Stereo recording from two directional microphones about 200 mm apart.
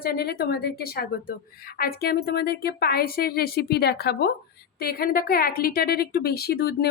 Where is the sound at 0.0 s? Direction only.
50° left (ahead or behind).